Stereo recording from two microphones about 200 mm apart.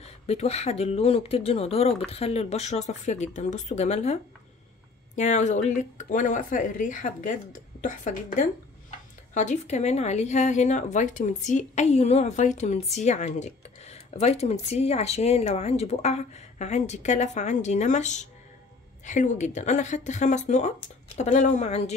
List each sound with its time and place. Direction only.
0.0 s speech: 30° left (ahead or behind)